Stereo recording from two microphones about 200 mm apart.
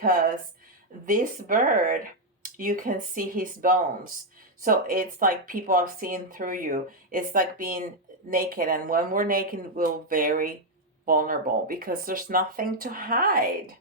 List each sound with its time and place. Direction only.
0.0 s speech: 45° right (ahead or behind)